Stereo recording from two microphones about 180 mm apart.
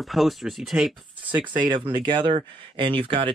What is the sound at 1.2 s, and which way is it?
Speech, 25° right (ahead or behind).